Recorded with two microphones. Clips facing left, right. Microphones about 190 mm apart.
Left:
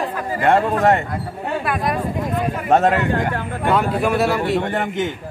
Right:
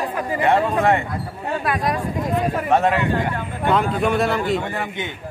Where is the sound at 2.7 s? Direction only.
45° left (ahead or behind).